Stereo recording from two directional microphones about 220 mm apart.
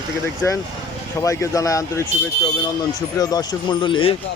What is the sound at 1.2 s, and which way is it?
Speech, 15° left (ahead or behind).